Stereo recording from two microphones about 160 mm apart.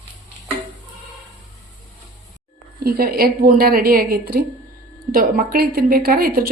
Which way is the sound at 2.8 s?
70° right (ahead or behind).